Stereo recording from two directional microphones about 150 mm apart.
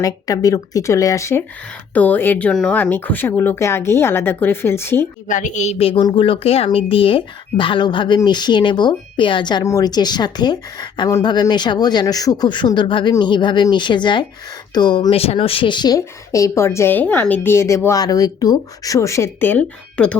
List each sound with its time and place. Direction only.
0.0 s speech: 25° left (ahead or behind)
5.3 s a woman's voice: 55° left (ahead or behind); by 20.1 s 10° left (ahead or behind)